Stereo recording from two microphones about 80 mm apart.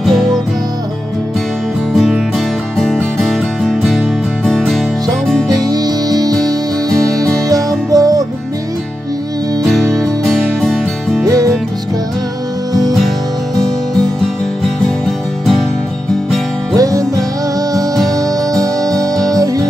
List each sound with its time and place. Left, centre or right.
0.0 s music: centre
2.0 s music: centre
5.6 s music: right
9.6 s music: centre
11.2 s music: right
14.9 s music: centre
16.7 s music: right